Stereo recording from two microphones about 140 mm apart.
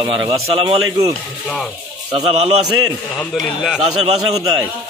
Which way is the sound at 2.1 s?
45° right (ahead or behind).